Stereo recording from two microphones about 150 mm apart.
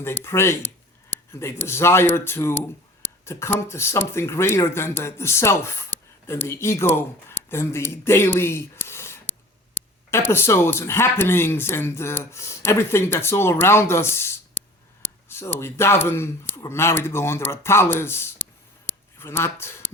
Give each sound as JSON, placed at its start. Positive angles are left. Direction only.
{"t": 0.0, "sound": "speech", "side_deg": 15}